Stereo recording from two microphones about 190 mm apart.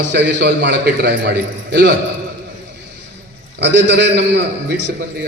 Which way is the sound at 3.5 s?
65° right (ahead or behind).